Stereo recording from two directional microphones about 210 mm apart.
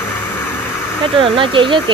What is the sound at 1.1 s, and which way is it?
Speech, 25° right (ahead or behind).